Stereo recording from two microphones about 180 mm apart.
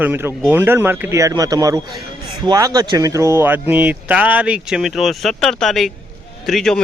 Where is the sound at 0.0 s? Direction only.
10° right (ahead or behind).